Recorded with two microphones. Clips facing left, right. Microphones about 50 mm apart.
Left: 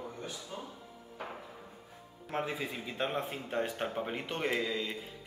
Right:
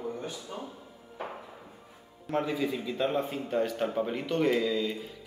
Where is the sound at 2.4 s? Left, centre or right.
Left.